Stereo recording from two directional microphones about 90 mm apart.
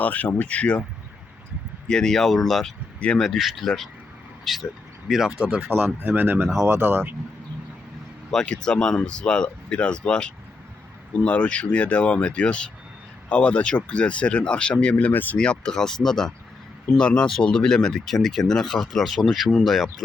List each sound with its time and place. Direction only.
0.0 s speech: 15° left (ahead or behind)
1.9 s speech: 5° left (ahead or behind); by 7.2 s 20° right (ahead or behind)
8.3 s speech: 10° left (ahead or behind)